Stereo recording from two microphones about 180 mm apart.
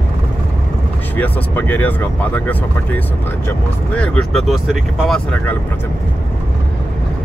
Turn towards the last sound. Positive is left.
turn(degrees=5)  # may be behind; listen again after turning